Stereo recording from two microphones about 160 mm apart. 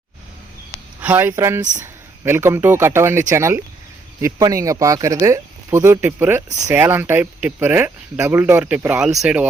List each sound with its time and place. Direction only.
1.0 s speech: 10° right (ahead or behind)